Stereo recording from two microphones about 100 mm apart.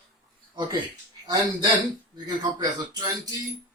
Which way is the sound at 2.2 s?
45° right (ahead or behind).